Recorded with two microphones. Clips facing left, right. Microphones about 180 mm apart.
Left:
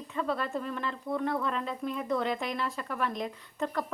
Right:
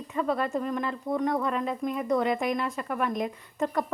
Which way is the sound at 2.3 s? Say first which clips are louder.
Right 5 dB; 50° right (ahead or behind).